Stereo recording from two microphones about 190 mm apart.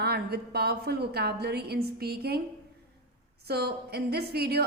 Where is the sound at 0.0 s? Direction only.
55° right (ahead or behind).